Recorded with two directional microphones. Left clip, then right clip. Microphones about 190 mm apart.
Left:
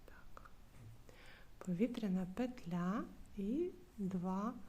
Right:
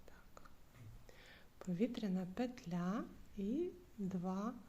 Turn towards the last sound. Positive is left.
turn(degrees=10)  # may be behind; listen again after turning